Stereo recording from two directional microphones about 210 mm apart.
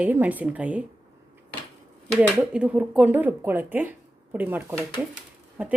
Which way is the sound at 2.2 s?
5° right (ahead or behind).